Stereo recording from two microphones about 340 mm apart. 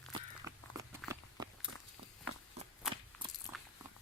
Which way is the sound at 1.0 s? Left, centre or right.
Centre.